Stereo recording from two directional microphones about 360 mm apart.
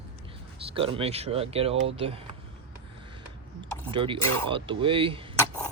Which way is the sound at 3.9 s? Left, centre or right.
Centre.